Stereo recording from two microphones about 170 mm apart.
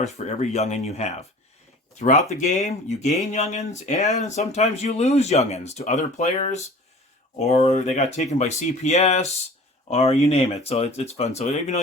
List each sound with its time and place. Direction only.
0.0 s speech: 40° left (ahead or behind)